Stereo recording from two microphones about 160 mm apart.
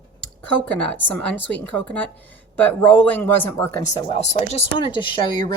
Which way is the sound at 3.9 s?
30° left (ahead or behind).